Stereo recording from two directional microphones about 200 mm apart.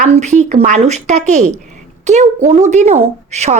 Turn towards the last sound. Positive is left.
turn(degrees=-35)  # may be behind; listen again after turning